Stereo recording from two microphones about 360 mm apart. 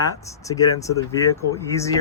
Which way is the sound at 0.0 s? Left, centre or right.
Centre.